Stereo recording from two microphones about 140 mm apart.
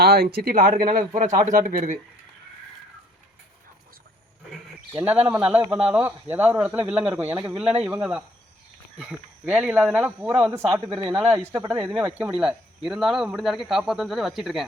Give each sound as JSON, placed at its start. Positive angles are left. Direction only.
{"t": 0.0, "sound": "a sound", "side_deg": -90}
{"t": 0.3, "sound": "speech", "side_deg": -85}
{"t": 4.9, "sound": "speech", "side_deg": -10}
{"t": 11.3, "sound": "speech", "side_deg": -25}
{"t": 11.6, "sound": "speech", "side_deg": -10}